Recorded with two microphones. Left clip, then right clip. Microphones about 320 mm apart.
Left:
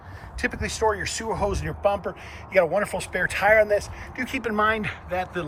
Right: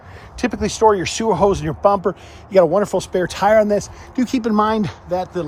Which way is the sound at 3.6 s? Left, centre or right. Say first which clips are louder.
Right 4 dB; right.